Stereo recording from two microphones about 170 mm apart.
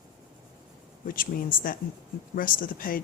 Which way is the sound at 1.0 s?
55° left (ahead or behind).